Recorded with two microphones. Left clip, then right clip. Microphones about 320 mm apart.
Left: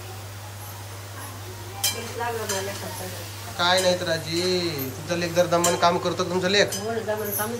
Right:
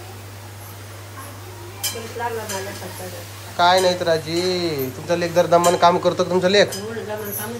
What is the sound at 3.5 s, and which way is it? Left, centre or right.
Speech, centre.